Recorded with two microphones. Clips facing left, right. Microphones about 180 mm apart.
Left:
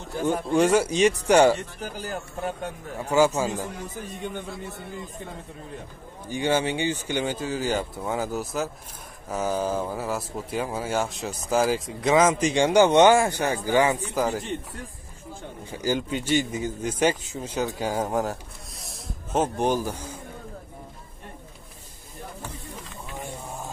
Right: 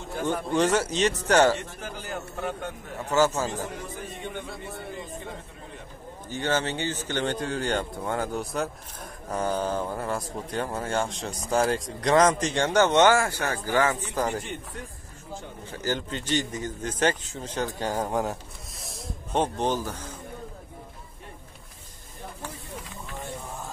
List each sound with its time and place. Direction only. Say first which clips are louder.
0.2 s speech: left 3 dB; 10° left (ahead or behind)
1.8 s a man's voice: left 2 dB; 35° left (ahead or behind)
3.3 s speech: left 3 dB; 10° left (ahead or behind)
6.2 s speech: left 3 dB; 10° left (ahead or behind)
15.7 s speech: left 4 dB; 10° left (ahead or behind)
23.1 s a sound: left 1 dB; 15° left (ahead or behind)